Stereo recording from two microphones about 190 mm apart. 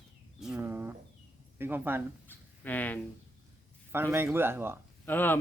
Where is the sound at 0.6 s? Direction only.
10° right (ahead or behind).